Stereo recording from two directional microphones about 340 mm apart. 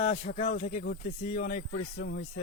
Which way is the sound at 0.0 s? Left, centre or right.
Centre.